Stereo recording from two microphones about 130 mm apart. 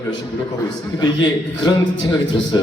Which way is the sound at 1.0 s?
35° left (ahead or behind).